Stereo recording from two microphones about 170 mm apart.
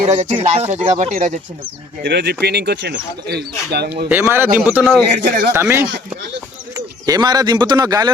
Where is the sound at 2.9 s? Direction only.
70° right (ahead or behind).